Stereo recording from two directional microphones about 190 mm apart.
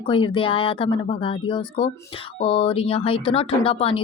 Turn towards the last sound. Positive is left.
turn(degrees=30)  # may be behind; listen again after turning